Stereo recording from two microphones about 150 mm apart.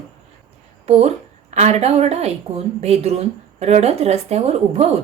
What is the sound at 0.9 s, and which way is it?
Speech, 45° right (ahead or behind).